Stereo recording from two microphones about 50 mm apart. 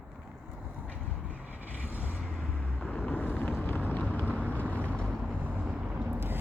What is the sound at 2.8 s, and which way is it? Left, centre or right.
Vehicle, left.